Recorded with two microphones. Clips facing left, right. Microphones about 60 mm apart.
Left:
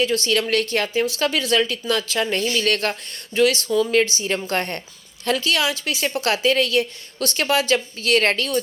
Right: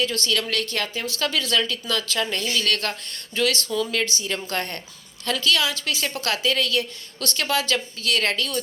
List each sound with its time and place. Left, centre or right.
0.0 s a woman's voice: centre
7.9 s a woman's voice: left